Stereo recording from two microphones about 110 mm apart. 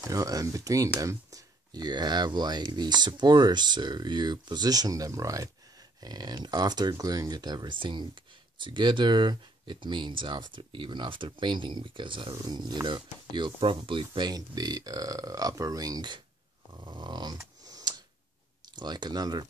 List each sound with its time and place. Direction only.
0.0 s speech: 30° right (ahead or behind)
16.7 s snoring: 45° right (ahead or behind)
17.4 s tick: 35° right (ahead or behind)
18.8 s speech: 40° right (ahead or behind)